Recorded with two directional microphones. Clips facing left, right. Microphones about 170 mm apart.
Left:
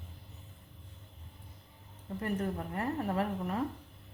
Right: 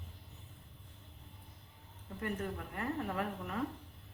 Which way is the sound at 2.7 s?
35° left (ahead or behind).